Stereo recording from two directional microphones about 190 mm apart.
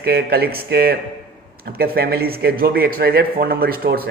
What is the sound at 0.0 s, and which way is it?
A man's voice, 55° right (ahead or behind).